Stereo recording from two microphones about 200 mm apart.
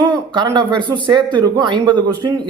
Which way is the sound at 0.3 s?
20° right (ahead or behind).